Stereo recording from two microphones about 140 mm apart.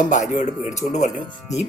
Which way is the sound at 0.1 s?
60° left (ahead or behind).